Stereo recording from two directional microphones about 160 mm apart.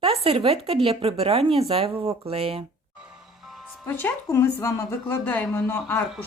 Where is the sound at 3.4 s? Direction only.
Centre (ahead or behind).